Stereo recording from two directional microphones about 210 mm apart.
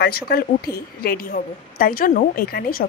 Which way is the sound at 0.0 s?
45° left (ahead or behind).